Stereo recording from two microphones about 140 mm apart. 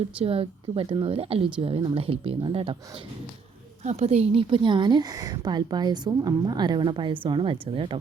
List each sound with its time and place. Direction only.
0.2 s speech: 45° right (ahead or behind)
3.8 s speech: 50° right (ahead or behind)